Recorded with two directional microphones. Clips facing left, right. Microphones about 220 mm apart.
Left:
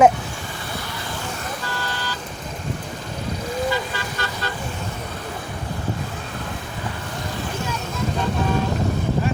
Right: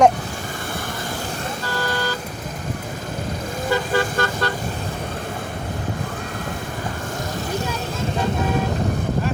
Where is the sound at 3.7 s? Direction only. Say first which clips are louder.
Right 5 dB; 50° right (ahead or behind).